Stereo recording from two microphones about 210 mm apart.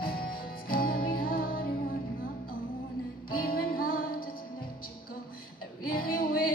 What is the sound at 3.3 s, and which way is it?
Music, 45° left (ahead or behind).